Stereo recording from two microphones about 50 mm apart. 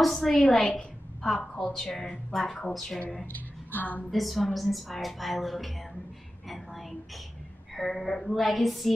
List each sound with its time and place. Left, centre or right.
0.0 s a woman's voice: centre
3.3 s a woman's voice: left
4.0 s a woman's voice: centre
6.5 s a sound: centre
7.7 s a woman's voice: centre